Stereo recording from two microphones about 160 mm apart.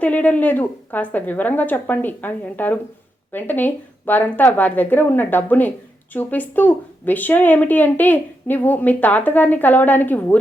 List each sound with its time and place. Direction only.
0.0 s speech: 10° left (ahead or behind)